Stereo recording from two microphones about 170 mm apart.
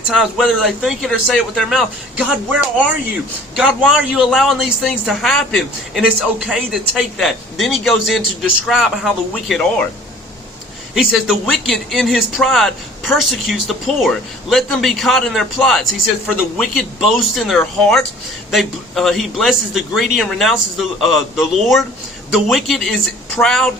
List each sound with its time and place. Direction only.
0.1 s speech: centre (ahead or behind)
10.9 s speech: centre (ahead or behind)